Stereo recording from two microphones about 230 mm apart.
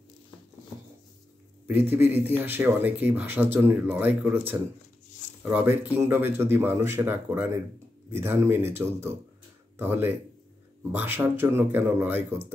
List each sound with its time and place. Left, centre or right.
1.7 s speech: centre